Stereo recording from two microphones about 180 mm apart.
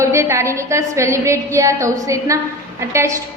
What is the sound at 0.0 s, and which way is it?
A woman's voice, 15° right (ahead or behind).